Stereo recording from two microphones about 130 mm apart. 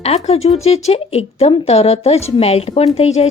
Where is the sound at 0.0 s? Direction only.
55° left (ahead or behind).